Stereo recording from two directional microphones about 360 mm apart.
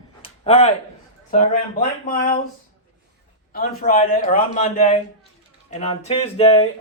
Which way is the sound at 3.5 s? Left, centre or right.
Left.